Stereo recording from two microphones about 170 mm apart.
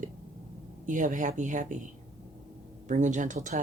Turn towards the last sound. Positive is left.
turn(degrees=-45)  # may be behind; listen again after turning